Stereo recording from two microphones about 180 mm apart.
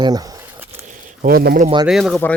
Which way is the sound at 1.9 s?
Centre (ahead or behind).